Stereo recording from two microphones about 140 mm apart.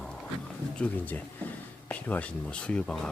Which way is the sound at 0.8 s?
10° left (ahead or behind).